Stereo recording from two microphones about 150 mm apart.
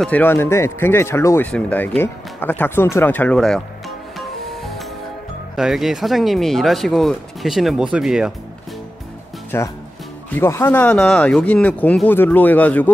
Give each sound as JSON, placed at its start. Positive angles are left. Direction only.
{"t": 0.0, "sound": "speech", "side_deg": 10}
{"t": 4.2, "sound": "music", "side_deg": 0}
{"t": 5.6, "sound": "speech", "side_deg": 0}
{"t": 9.5, "sound": "speech", "side_deg": 15}